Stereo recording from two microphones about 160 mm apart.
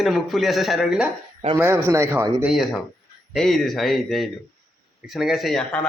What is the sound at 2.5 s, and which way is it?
A man's voice, centre (ahead or behind).